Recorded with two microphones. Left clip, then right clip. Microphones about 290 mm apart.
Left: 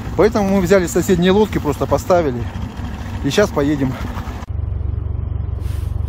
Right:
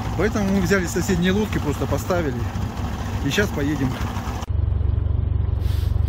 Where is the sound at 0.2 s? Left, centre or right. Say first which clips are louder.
Left 9 dB; centre.